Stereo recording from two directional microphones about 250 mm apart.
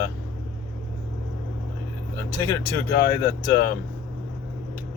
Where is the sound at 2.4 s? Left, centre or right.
Centre.